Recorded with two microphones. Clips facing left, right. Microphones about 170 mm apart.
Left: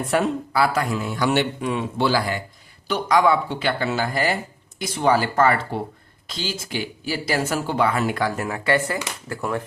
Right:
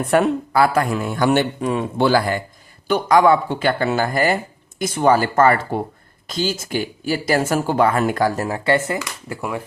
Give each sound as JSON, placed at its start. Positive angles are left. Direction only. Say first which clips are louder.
{"t": 0.1, "sound": "speech", "louder": "right 5 dB", "side_deg": -50}
{"t": 9.3, "sound": "speech", "louder": "even", "side_deg": -10}